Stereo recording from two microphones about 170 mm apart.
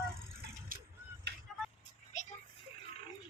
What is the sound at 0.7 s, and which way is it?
Vehicle, 55° right (ahead or behind).